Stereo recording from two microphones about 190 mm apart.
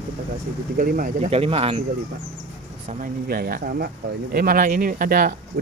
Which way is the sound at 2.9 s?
50° right (ahead or behind).